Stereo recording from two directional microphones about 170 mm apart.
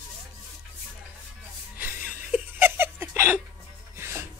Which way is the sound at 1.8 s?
10° right (ahead or behind).